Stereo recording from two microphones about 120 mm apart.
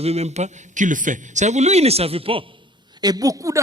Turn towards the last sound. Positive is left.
turn(degrees=-30)  # may be behind; listen again after turning